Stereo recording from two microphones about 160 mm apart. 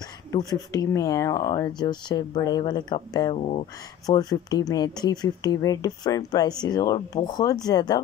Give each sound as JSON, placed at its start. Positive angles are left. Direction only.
{"t": 0.3, "sound": "speech", "side_deg": 20}
{"t": 3.3, "sound": "speech", "side_deg": 40}
{"t": 4.0, "sound": "speech", "side_deg": 25}